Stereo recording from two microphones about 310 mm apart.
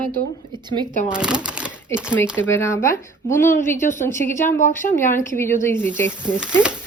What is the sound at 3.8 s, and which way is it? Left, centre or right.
Speech, left.